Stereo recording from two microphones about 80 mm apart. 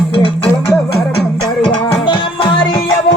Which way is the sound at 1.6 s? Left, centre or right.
Left.